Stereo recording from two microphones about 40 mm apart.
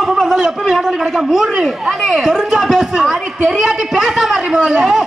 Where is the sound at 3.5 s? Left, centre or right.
Centre.